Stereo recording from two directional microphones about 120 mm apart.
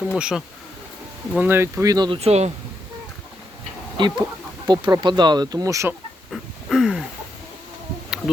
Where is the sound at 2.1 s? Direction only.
60° right (ahead or behind).